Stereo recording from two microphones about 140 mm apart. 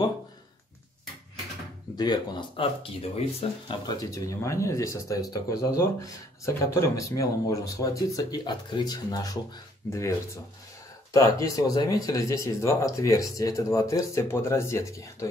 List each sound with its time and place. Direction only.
2.0 s speech: 30° left (ahead or behind)
11.1 s speech: 25° left (ahead or behind)